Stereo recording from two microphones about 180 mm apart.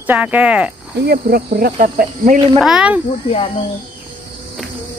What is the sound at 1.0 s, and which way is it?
Speech, 55° right (ahead or behind).